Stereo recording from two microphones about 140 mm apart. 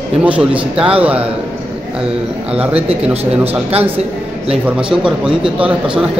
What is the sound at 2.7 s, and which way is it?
Speech, 45° right (ahead or behind).